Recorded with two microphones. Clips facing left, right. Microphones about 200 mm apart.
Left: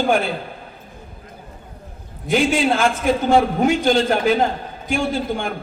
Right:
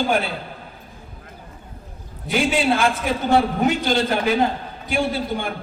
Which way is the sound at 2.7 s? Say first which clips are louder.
Left 3 dB; 50° left (ahead or behind).